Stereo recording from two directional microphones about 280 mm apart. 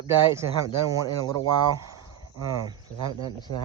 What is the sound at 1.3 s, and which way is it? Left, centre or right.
Speech, centre.